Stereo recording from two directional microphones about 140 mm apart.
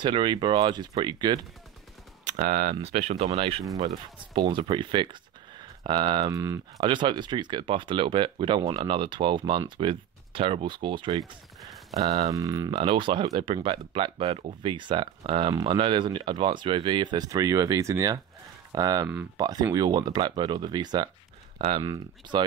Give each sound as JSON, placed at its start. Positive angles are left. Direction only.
{"t": 0.0, "sound": "speech", "side_deg": -35}
{"t": 2.2, "sound": "speech", "side_deg": -65}
{"t": 6.8, "sound": "speech", "side_deg": -35}
{"t": 11.9, "sound": "speech", "side_deg": -50}
{"t": 12.3, "sound": "speech", "side_deg": -25}
{"t": 12.7, "sound": "speech", "side_deg": -35}
{"t": 21.8, "sound": "speech", "side_deg": -30}